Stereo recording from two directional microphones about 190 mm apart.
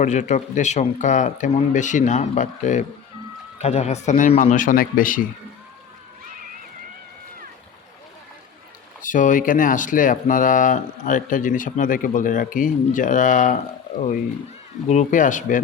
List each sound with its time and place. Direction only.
0.0 s speech: 40° left (ahead or behind)
9.0 s speech: 45° left (ahead or behind)
14.8 s speech: 40° left (ahead or behind)